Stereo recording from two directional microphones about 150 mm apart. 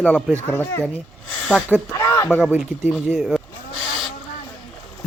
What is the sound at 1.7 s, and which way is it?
Speech, 5° left (ahead or behind).